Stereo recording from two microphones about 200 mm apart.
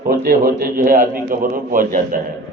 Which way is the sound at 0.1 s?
45° right (ahead or behind).